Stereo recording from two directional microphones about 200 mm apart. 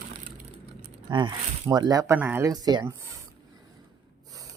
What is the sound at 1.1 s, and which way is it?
Speech, 20° right (ahead or behind).